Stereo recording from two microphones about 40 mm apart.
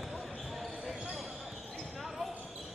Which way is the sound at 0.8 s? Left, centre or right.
Centre.